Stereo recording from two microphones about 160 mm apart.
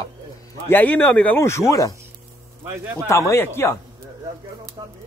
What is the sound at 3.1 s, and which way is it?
Speech, 15° left (ahead or behind).